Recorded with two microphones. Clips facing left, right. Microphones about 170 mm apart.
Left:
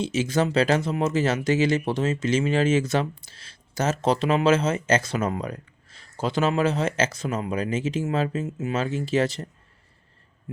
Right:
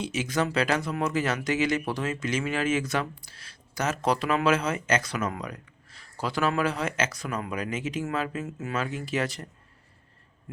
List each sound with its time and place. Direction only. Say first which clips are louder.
0.0 s speech: left 4 dB; 30° left (ahead or behind)